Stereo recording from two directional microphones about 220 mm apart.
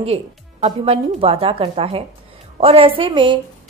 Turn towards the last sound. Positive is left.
turn(degrees=-20)  # may be behind; listen again after turning